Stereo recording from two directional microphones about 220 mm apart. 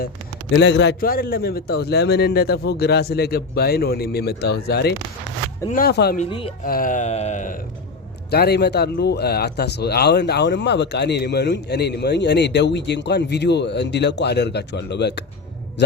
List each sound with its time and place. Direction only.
0.5 s speech: 55° left (ahead or behind)
6.1 s speech: 25° left (ahead or behind)
6.7 s a sound: 40° left (ahead or behind)
8.3 s speech: 45° left (ahead or behind)